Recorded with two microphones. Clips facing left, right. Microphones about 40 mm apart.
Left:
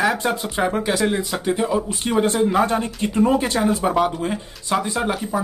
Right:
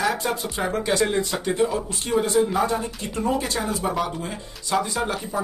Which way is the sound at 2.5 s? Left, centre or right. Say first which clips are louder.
Left 4 dB; left.